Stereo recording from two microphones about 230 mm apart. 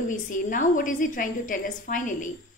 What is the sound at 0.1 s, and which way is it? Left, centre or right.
A woman's voice, left.